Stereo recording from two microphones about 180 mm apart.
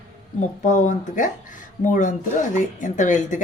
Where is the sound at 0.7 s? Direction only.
45° left (ahead or behind).